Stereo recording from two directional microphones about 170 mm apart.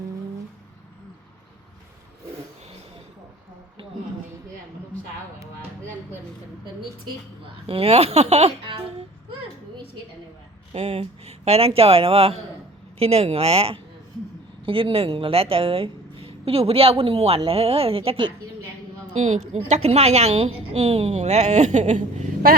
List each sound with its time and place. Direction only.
7.7 s speech: 35° right (ahead or behind)
10.8 s a woman's voice: 40° right (ahead or behind)
19.1 s a woman's voice: 45° right (ahead or behind)